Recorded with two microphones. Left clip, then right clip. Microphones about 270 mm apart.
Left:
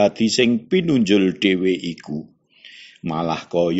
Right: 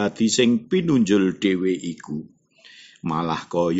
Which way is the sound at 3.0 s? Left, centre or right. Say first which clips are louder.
Left 1 dB; centre.